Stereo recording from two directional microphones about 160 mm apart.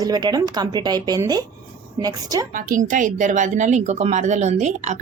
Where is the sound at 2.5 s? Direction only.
55° right (ahead or behind).